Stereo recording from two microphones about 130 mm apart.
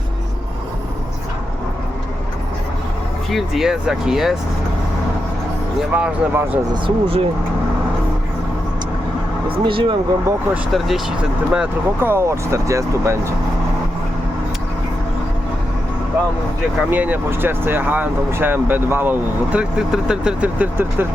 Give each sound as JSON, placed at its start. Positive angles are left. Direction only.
{"t": 3.2, "sound": "speech", "side_deg": 0}
{"t": 5.9, "sound": "speech", "side_deg": -15}
{"t": 6.8, "sound": "speech", "side_deg": -45}
{"t": 9.6, "sound": "speech", "side_deg": -40}
{"t": 10.7, "sound": "speech", "side_deg": 0}
{"t": 16.9, "sound": "speech", "side_deg": -15}